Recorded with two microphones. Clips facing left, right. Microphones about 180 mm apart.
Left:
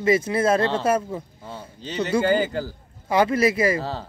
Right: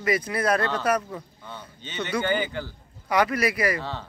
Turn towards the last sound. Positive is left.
turn(degrees=35)  # may be behind; listen again after turning